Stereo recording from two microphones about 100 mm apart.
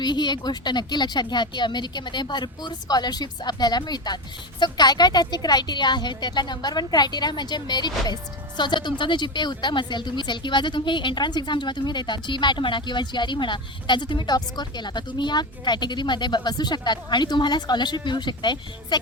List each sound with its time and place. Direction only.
0.0 s speech: 45° left (ahead or behind)